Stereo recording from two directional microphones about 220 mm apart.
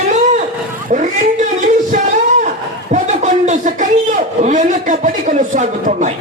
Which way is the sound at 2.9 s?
35° right (ahead or behind).